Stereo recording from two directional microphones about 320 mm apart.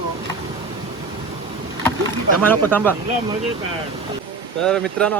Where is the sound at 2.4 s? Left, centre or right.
Centre.